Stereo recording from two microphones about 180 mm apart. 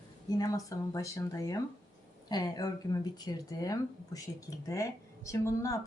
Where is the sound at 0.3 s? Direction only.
20° left (ahead or behind).